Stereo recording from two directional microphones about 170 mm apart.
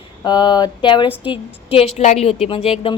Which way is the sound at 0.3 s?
25° left (ahead or behind).